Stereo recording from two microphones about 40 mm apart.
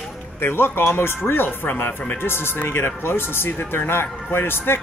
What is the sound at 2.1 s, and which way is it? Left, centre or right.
Speech, left.